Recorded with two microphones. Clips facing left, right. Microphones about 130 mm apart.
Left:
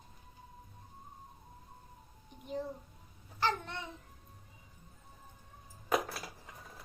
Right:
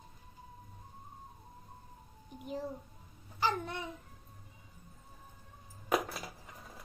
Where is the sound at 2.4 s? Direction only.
5° right (ahead or behind).